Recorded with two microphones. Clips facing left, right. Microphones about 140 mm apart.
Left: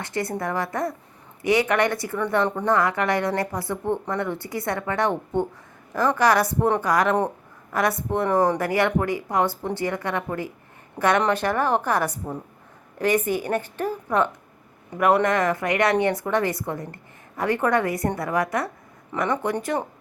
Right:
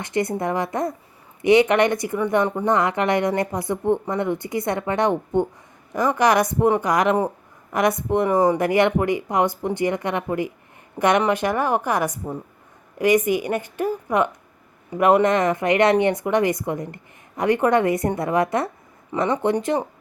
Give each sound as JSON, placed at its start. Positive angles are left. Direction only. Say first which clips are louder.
{"t": 0.0, "sound": "a woman's voice", "louder": "right 4 dB", "side_deg": -20}